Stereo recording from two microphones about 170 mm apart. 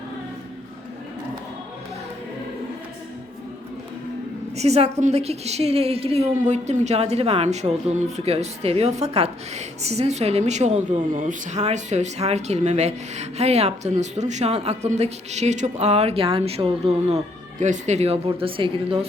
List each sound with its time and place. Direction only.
4.5 s a woman's voice: 40° right (ahead or behind)